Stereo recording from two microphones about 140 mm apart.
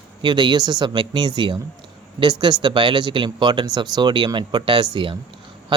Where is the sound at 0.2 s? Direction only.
35° right (ahead or behind).